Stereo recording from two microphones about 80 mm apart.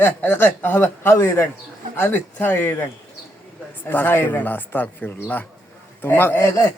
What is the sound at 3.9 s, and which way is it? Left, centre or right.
Speech, left.